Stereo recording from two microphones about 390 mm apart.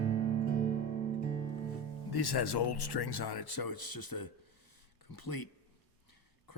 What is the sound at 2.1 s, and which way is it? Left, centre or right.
Speech, left.